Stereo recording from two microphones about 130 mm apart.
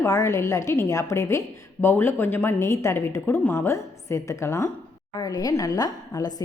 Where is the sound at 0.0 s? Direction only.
25° left (ahead or behind).